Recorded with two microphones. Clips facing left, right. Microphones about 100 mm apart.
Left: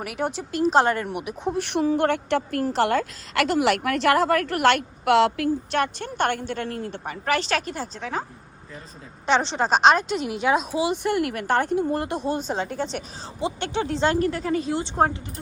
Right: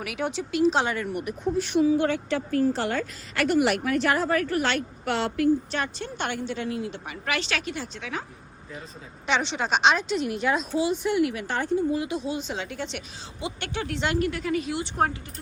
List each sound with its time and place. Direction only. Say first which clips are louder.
0.0 s a woman's voice: left 2 dB; 45° left (ahead or behind)
1.2 s a woman's voice: even; 70° left (ahead or behind)
5.7 s a woman's voice: left 6 dB; 60° left (ahead or behind); by 8.2 s 40° left (ahead or behind)
9.2 s speech: left 4 dB; 35° left (ahead or behind); by 10.2 s 50° left (ahead or behind)
10.2 s a woman's voice: left 3 dB; 85° left; by 13.0 s 40° left (ahead or behind)
13.4 s speech: left 6 dB; 25° left (ahead or behind)